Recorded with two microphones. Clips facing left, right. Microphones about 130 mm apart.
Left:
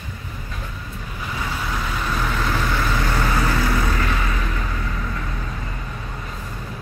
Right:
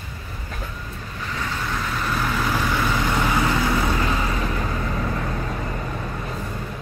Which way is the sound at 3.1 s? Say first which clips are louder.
Right 1 dB; 15° right (ahead or behind).